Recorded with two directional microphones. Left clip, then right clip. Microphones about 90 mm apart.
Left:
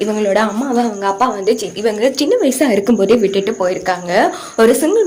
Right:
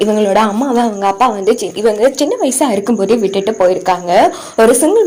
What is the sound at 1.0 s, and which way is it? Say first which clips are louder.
A woman's voice: right 3 dB; 35° right (ahead or behind).